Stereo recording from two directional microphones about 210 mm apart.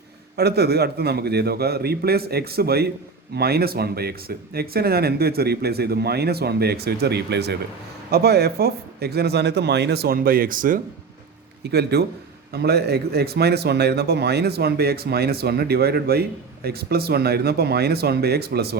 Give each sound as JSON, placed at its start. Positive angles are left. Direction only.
{"t": 0.3, "sound": "speech", "side_deg": -50}
{"t": 11.6, "sound": "speech", "side_deg": -50}